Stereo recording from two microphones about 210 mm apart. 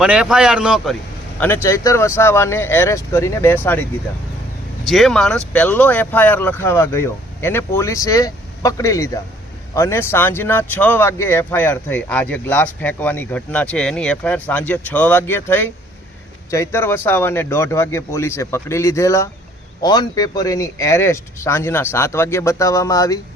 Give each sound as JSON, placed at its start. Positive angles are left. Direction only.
{"t": 0.0, "sound": "a man's voice", "side_deg": -5}
{"t": 1.4, "sound": "speech", "side_deg": 10}
{"t": 4.9, "sound": "speech", "side_deg": 0}